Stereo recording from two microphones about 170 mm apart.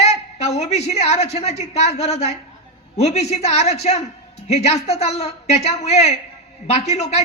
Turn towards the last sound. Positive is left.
turn(degrees=40)  # may be behind; listen again after turning